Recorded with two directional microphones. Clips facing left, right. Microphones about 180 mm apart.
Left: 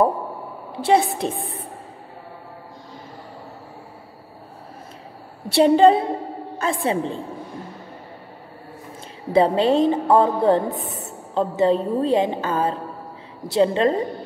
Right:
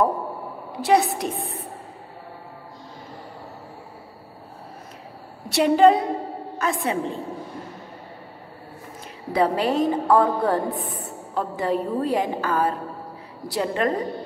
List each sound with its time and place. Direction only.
0.7 s a woman's voice: 25° left (ahead or behind)
5.5 s a woman's voice: 30° left (ahead or behind)
9.3 s a woman's voice: 25° left (ahead or behind)